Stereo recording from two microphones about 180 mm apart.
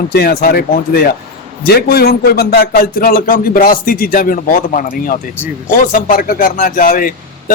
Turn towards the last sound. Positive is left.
turn(degrees=50)  # may be behind; listen again after turning